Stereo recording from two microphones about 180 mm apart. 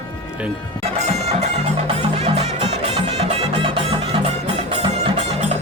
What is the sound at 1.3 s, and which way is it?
Music, 35° right (ahead or behind).